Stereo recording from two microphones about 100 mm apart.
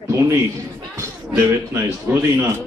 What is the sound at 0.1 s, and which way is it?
Speech, 30° right (ahead or behind).